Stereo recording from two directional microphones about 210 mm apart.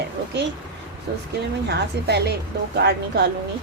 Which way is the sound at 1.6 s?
50° right (ahead or behind).